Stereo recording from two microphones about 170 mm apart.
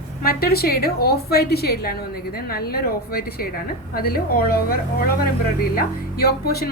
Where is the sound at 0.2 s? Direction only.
60° left (ahead or behind).